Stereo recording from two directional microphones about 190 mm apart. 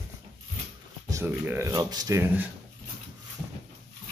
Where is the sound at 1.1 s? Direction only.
10° right (ahead or behind).